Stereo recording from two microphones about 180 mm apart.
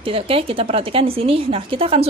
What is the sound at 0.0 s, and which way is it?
A woman's voice, 30° right (ahead or behind).